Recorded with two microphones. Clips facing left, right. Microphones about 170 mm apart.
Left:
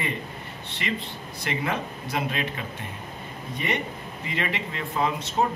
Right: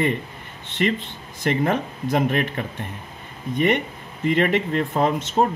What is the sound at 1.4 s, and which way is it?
Speech, 45° right (ahead or behind).